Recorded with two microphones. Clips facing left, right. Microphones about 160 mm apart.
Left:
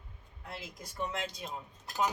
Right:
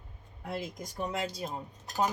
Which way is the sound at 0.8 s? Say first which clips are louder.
Even; 40° right (ahead or behind).